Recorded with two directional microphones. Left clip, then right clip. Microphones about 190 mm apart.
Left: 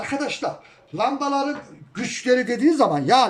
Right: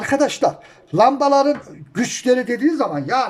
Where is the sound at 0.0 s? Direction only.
30° right (ahead or behind).